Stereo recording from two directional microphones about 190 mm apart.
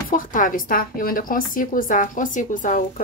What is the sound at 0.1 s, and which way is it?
A woman's voice, 45° left (ahead or behind).